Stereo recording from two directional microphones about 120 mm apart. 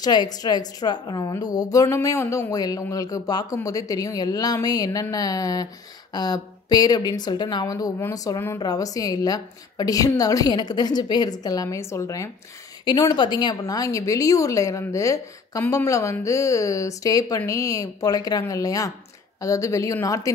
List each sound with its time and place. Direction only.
0.0 s a woman's voice: 35° left (ahead or behind)